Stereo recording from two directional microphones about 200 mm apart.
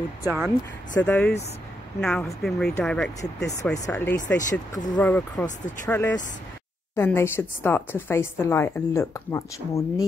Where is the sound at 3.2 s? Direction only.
15° left (ahead or behind).